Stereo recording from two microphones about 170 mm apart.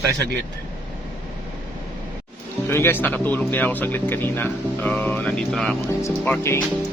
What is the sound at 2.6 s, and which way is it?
Speech, 15° left (ahead or behind).